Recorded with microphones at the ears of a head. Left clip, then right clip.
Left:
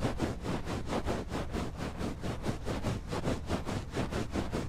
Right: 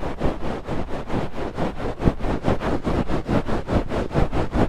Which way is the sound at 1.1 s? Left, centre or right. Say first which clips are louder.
Right 9 dB; right.